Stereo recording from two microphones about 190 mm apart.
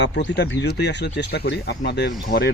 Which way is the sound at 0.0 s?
65° left (ahead or behind).